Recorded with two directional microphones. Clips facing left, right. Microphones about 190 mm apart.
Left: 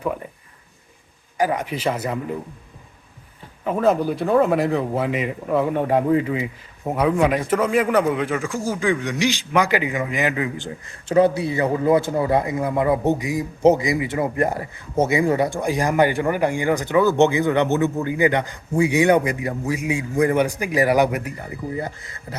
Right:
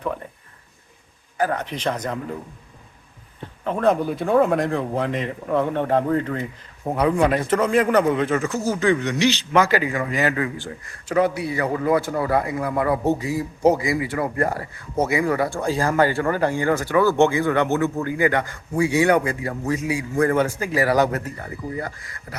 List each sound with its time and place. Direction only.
1.4 s speech: 10° left (ahead or behind)
3.6 s speech: 5° left (ahead or behind); by 22.4 s 25° left (ahead or behind)